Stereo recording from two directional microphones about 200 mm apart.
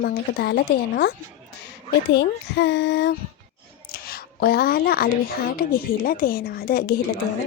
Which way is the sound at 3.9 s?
50° left (ahead or behind).